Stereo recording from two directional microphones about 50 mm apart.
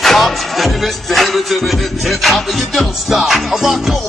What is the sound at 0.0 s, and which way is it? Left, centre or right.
Music, centre.